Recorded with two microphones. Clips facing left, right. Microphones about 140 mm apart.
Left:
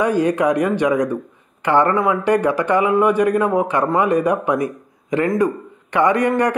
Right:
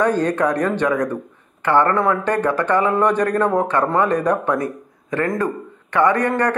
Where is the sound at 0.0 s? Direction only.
10° left (ahead or behind).